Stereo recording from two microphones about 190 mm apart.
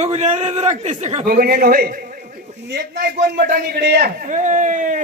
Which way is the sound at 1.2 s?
50° right (ahead or behind).